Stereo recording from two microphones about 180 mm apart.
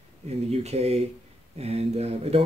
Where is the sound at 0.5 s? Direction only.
35° right (ahead or behind).